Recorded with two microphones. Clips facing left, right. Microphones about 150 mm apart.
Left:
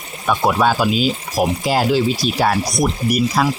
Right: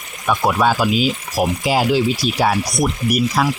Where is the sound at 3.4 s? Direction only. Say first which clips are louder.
Left 1 dB; centre (ahead or behind).